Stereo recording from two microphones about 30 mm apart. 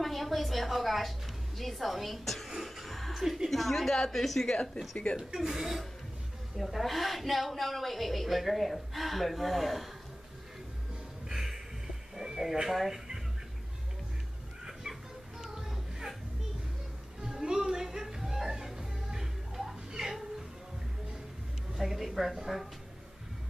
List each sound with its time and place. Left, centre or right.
0.0 s a woman's voice: centre
5.1 s speech: left
5.5 s a woman's voice: centre
6.5 s a woman's voice: centre
11.2 s a sound: centre
12.6 s a woman's voice: centre
14.7 s music: centre
17.3 s speech: right
17.8 s music: centre
21.7 s a woman's voice: centre